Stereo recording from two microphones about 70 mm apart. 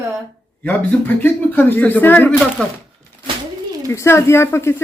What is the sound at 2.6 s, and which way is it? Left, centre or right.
Speech, centre.